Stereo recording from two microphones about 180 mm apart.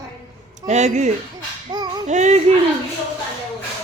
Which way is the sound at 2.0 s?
40° right (ahead or behind).